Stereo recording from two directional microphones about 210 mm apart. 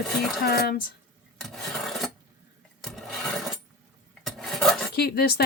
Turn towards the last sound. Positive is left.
turn(degrees=50)  # may be behind; listen again after turning